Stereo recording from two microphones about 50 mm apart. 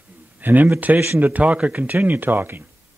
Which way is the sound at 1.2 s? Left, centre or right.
Right.